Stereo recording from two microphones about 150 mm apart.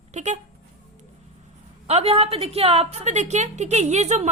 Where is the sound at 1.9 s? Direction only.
40° right (ahead or behind).